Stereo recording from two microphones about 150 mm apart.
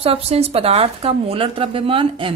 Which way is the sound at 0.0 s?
40° right (ahead or behind).